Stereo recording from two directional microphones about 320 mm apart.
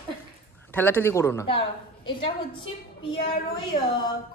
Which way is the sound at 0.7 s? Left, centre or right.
Centre.